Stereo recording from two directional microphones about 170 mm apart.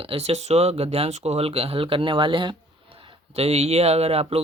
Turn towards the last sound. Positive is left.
turn(degrees=-35)  # may be behind; listen again after turning